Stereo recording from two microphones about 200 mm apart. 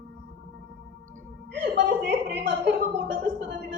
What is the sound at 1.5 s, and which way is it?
Chuckle, 60° right (ahead or behind).